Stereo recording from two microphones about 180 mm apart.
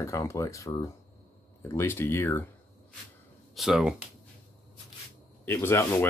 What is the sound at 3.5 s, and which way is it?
Speech, centre (ahead or behind).